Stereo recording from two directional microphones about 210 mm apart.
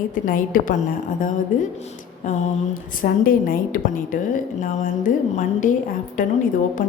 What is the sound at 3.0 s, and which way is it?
A woman's voice, 40° left (ahead or behind).